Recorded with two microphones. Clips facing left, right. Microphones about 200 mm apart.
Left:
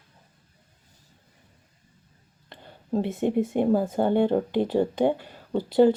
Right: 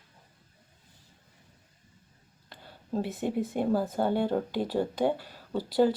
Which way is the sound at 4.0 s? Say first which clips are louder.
Left 5 dB; 20° left (ahead or behind).